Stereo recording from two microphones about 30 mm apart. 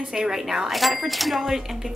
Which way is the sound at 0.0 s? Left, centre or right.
Right.